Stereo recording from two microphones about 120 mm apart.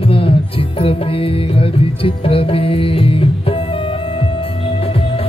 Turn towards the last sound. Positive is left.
turn(degrees=50)  # may be behind; listen again after turning